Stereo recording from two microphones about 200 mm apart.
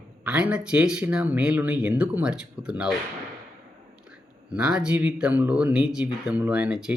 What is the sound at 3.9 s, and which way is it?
Speech, 5° right (ahead or behind).